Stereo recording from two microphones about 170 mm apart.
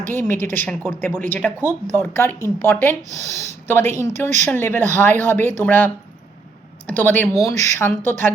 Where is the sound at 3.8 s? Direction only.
45° right (ahead or behind).